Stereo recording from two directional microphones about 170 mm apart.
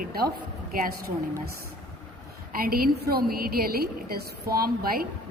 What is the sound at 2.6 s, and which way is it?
A woman's voice, 60° right (ahead or behind).